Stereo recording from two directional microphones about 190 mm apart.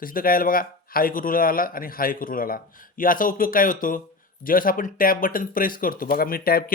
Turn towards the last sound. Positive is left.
turn(degrees=50)  # may be behind; listen again after turning